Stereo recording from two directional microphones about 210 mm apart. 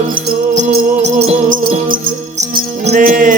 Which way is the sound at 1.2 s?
30° right (ahead or behind).